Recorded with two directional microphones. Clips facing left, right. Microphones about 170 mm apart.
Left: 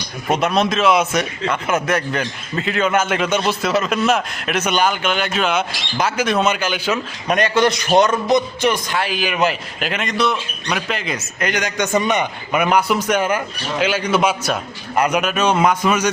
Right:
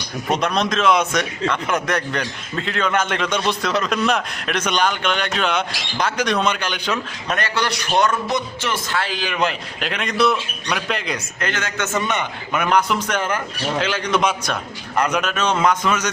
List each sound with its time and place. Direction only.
0.3 s a man's voice: 5° left (ahead or behind)
7.3 s a man's voice: 20° left (ahead or behind); by 11.4 s centre (ahead or behind)
11.4 s a man's voice: 15° left (ahead or behind)